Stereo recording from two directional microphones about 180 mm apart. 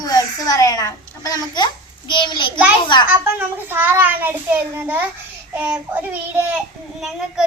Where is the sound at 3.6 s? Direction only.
10° right (ahead or behind).